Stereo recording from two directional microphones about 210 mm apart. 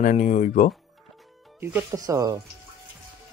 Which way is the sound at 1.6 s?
15° right (ahead or behind).